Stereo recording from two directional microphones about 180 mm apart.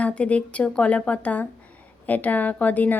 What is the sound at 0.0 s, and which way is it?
Speech, 5° left (ahead or behind).